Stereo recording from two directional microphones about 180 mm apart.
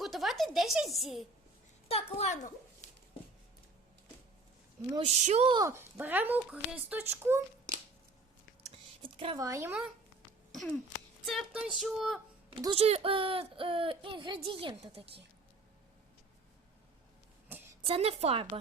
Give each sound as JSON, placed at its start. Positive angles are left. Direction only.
{"t": 0.0, "sound": "speech", "side_deg": 0}
{"t": 1.9, "sound": "a woman's voice", "side_deg": 35}
{"t": 5.0, "sound": "a woman's voice", "side_deg": -40}
{"t": 5.5, "sound": "speech", "side_deg": -15}
{"t": 9.0, "sound": "speech", "side_deg": -30}
{"t": 9.4, "sound": "speech", "side_deg": -15}
{"t": 11.3, "sound": "a sound", "side_deg": -5}
{"t": 12.5, "sound": "speech", "side_deg": -30}
{"t": 17.5, "sound": "a sound", "side_deg": -10}
{"t": 17.8, "sound": "a woman's voice", "side_deg": -35}